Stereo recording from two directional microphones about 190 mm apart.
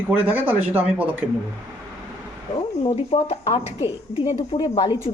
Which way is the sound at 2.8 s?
30° left (ahead or behind).